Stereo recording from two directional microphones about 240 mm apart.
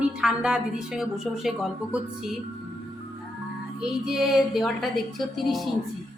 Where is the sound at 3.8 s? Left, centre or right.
Centre.